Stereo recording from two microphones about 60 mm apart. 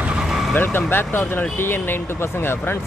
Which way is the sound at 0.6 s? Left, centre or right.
Left.